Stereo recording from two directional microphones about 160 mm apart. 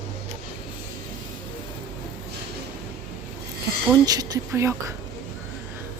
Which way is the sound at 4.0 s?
25° right (ahead or behind).